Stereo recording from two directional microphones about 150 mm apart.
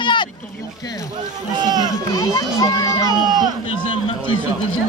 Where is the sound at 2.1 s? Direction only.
25° left (ahead or behind).